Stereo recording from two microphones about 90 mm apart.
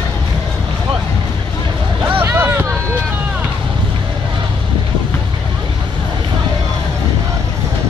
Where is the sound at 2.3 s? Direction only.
25° right (ahead or behind).